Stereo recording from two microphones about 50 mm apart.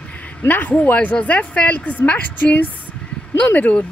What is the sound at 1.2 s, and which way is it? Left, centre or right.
Speech, left.